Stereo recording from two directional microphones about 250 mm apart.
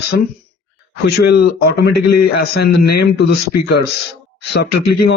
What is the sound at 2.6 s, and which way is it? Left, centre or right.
Speech, left.